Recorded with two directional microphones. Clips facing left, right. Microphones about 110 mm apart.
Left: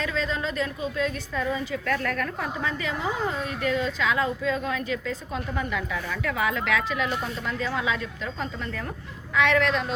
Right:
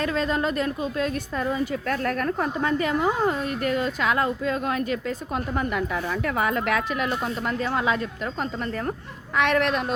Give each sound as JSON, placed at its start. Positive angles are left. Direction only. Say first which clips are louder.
{"t": 0.0, "sound": "a woman's voice", "louder": "right 4 dB", "side_deg": -50}
{"t": 9.3, "sound": "a woman's voice", "louder": "even", "side_deg": -50}